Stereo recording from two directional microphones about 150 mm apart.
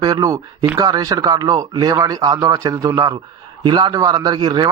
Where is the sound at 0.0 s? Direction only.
25° right (ahead or behind).